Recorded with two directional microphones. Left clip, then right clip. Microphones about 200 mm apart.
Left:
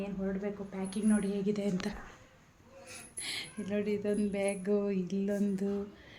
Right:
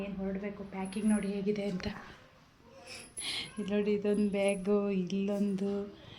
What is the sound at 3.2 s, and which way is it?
Speech, 5° right (ahead or behind).